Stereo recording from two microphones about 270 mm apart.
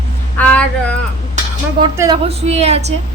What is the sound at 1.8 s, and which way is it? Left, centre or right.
A woman's voice, centre.